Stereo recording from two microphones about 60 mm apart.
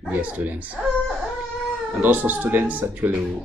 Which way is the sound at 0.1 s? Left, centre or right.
Right.